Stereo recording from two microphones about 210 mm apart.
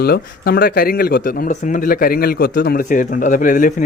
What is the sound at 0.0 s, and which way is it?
Speech, 45° left (ahead or behind).